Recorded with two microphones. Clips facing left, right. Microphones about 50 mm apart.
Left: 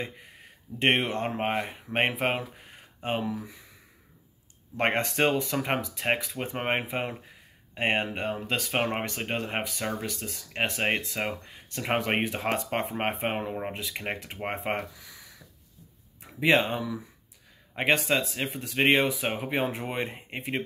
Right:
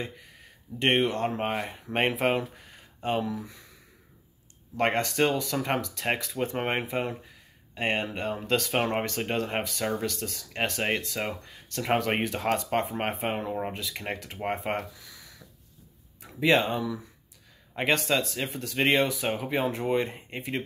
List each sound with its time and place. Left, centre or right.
0.7 s speech: left
2.7 s a sound: centre
3.3 s speech: centre
4.7 s speech: left